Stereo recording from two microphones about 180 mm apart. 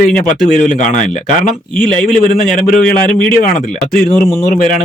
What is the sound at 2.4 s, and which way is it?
Speech, 45° left (ahead or behind).